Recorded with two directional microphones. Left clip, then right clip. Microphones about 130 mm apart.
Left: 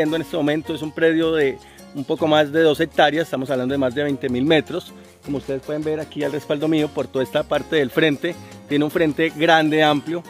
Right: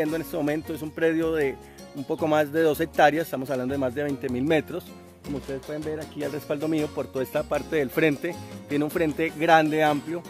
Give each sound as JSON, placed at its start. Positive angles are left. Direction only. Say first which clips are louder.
{"t": 0.0, "sound": "speech", "louder": "left 6 dB", "side_deg": 0}
{"t": 5.7, "sound": "speech", "louder": "left 9 dB", "side_deg": 30}
{"t": 7.3, "sound": "speech", "louder": "left 6 dB", "side_deg": 0}